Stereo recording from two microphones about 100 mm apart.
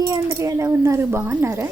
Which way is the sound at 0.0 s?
30° right (ahead or behind).